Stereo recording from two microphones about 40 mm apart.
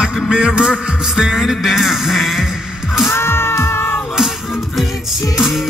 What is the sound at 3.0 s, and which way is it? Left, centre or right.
Music, left.